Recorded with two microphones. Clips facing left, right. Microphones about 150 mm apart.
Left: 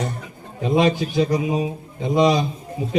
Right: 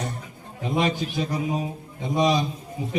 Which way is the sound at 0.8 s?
85° left.